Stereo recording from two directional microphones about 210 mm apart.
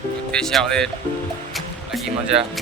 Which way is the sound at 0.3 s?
5° left (ahead or behind).